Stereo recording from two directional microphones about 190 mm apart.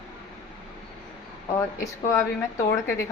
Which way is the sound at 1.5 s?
15° left (ahead or behind).